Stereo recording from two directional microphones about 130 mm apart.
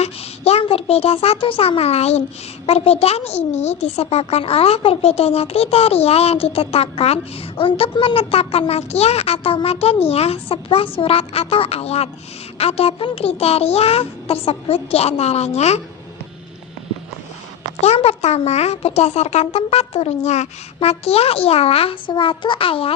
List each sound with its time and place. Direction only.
0.0 s a child's voice: 55° left (ahead or behind)
17.7 s speech: 55° left (ahead or behind)